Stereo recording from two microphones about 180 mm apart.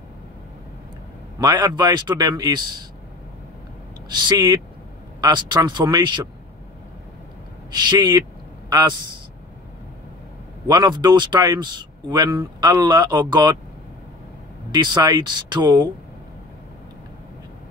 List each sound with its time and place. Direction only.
1.4 s speech: 20° right (ahead or behind)
4.1 s speech: 25° right (ahead or behind)
7.7 s speech: 25° right (ahead or behind)
10.7 s speech: 25° right (ahead or behind)
14.7 s speech: 25° right (ahead or behind)